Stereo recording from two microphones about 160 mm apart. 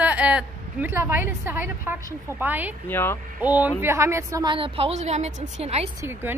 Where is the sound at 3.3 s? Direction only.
10° right (ahead or behind); by 5.9 s 40° right (ahead or behind).